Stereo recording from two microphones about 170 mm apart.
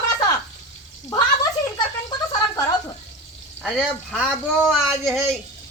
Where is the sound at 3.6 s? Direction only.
5° right (ahead or behind).